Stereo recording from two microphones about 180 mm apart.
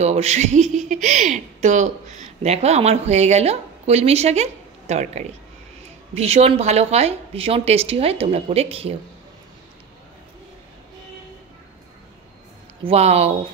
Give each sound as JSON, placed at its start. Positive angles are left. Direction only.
{"t": 0.0, "sound": "a woman's voice", "side_deg": -35}
{"t": 12.8, "sound": "a woman's voice", "side_deg": -35}